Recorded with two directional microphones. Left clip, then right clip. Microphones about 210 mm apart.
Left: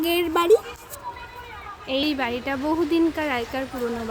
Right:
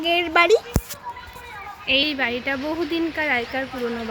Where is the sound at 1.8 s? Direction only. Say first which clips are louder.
Right 4 dB; 10° left (ahead or behind).